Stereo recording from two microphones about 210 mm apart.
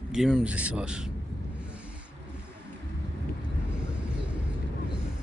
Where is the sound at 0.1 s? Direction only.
Centre (ahead or behind).